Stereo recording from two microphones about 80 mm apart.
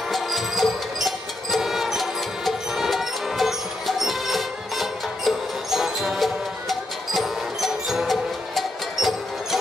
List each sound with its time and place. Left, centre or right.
0.1 s music: centre